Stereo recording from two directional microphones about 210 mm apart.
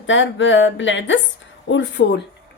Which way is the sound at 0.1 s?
65° left (ahead or behind).